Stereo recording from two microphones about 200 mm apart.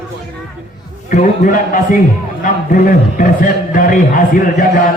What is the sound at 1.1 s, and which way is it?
A man's voice, 40° left (ahead or behind).